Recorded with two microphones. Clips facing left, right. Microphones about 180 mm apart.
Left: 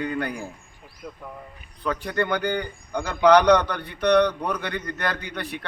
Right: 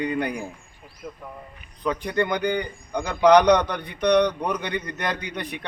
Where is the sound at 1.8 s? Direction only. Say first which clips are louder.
Right 1 dB; 15° right (ahead or behind).